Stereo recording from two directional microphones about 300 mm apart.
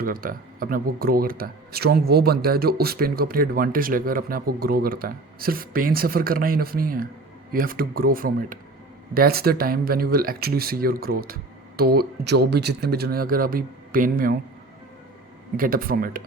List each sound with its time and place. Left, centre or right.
0.0 s speech: right
15.5 s speech: right